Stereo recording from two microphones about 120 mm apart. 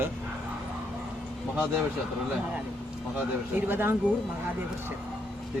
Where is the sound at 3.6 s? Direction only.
20° right (ahead or behind).